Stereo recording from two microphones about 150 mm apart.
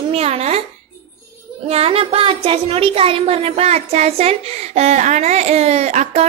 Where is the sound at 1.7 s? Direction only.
40° right (ahead or behind).